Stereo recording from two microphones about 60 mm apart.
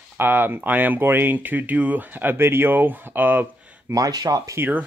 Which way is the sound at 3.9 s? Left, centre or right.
Right.